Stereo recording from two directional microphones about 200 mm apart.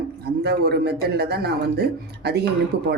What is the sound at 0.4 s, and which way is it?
Speech, 55° right (ahead or behind).